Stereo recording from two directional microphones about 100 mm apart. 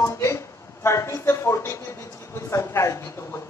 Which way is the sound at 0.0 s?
30° left (ahead or behind).